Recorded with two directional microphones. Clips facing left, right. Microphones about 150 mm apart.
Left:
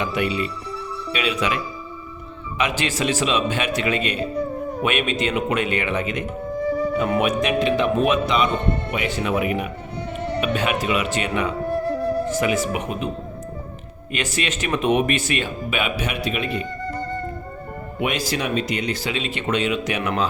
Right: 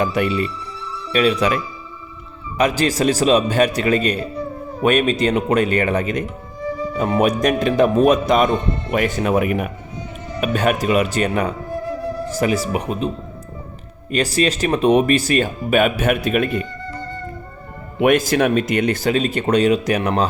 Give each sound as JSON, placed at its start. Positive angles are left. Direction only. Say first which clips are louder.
{"t": 0.0, "sound": "speech", "louder": "right 4 dB", "side_deg": -45}
{"t": 10.2, "sound": "music", "louder": "left 7 dB", "side_deg": 65}
{"t": 10.4, "sound": "speech", "louder": "right 6 dB", "side_deg": -45}
{"t": 14.1, "sound": "speech", "louder": "right 7 dB", "side_deg": -35}
{"t": 18.0, "sound": "speech", "louder": "right 9 dB", "side_deg": -50}